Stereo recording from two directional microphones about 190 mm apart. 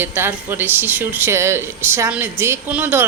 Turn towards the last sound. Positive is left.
turn(degrees=-10)  # may be behind; listen again after turning